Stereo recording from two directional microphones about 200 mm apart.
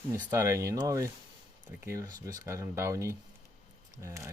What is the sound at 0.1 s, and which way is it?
Speech, 15° right (ahead or behind).